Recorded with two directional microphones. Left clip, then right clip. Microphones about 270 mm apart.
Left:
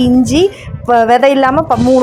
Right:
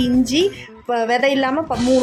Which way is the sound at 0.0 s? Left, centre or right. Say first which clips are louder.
Left 7 dB; centre.